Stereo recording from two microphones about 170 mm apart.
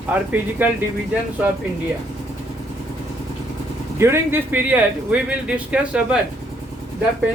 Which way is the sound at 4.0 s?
15° right (ahead or behind).